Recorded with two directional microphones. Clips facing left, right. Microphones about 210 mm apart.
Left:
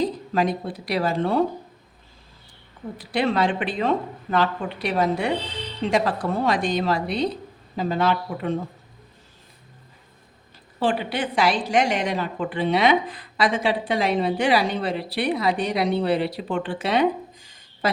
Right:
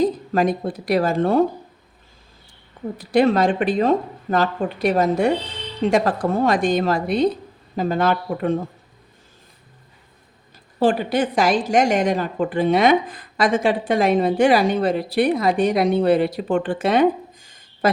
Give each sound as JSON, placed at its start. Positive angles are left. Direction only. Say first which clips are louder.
{"t": 0.0, "sound": "speech", "louder": "right 4 dB", "side_deg": -50}
{"t": 3.0, "sound": "a woman's voice", "louder": "right 6 dB", "side_deg": -45}
{"t": 10.8, "sound": "a woman's voice", "louder": "right 6 dB", "side_deg": -45}